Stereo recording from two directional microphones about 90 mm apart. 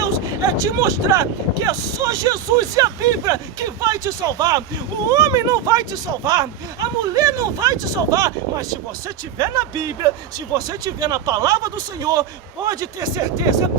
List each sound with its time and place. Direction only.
0.5 s speech: 40° right (ahead or behind)